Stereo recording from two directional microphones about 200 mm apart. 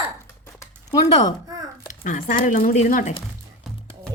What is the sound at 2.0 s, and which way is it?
Speech, 40° left (ahead or behind).